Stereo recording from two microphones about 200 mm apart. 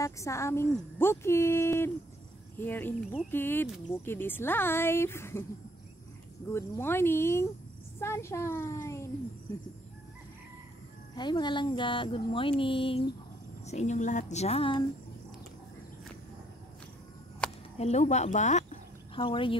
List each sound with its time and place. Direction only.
0.0 s speech: 15° left (ahead or behind)
6.5 s speech: 10° left (ahead or behind)
11.1 s a woman's voice: 20° left (ahead or behind)
17.4 s a sound: 5° left (ahead or behind)
17.7 s a sound: 35° left (ahead or behind)
19.2 s speech: 25° left (ahead or behind)